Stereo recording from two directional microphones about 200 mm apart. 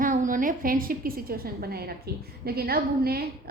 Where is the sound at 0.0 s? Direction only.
40° right (ahead or behind).